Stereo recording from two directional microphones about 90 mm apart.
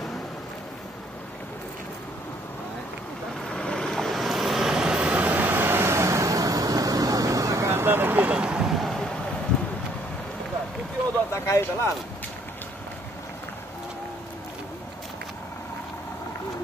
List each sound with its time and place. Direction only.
3.4 s vehicle: 10° left (ahead or behind)
11.3 s speech: 35° left (ahead or behind)